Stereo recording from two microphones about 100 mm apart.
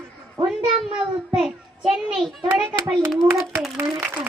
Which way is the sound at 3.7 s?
20° right (ahead or behind).